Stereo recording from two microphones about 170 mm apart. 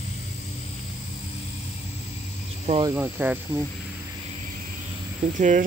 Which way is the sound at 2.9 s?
10° right (ahead or behind).